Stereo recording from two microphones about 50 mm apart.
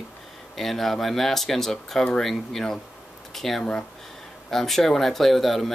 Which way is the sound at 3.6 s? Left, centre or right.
Centre.